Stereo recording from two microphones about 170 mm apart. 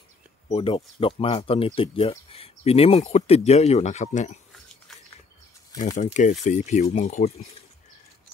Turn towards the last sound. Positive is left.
turn(degrees=40)  # may be behind; listen again after turning